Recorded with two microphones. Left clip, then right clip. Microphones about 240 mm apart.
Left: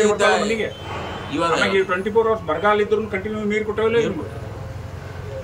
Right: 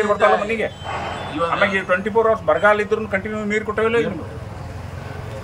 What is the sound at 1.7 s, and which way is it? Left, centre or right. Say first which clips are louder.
A man's voice: even; centre.